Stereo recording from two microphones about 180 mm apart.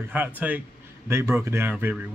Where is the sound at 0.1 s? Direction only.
10° right (ahead or behind).